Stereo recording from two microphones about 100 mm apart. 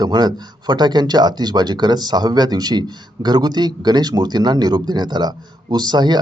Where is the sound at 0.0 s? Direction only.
45° right (ahead or behind).